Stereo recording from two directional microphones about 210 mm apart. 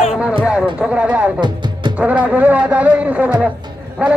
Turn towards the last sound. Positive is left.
turn(degrees=-5)  # may be behind; listen again after turning